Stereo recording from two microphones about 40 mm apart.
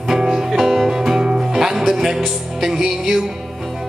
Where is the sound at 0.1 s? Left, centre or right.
Centre.